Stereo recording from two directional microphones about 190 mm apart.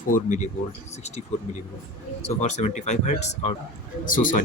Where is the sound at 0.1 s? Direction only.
40° left (ahead or behind).